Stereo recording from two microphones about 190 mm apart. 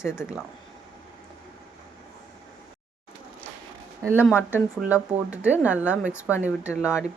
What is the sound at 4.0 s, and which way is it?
Speech, 10° right (ahead or behind).